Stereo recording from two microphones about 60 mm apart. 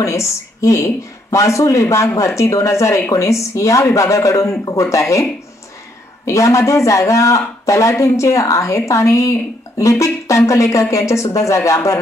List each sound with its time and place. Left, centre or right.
0.0 s speech: left
6.2 s speech: left